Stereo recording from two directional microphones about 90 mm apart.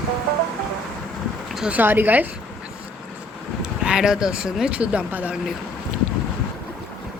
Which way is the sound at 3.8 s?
10° right (ahead or behind).